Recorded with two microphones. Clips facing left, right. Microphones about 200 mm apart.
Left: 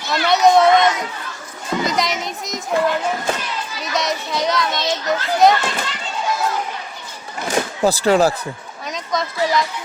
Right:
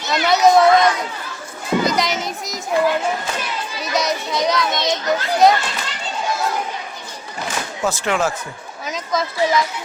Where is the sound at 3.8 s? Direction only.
Centre (ahead or behind).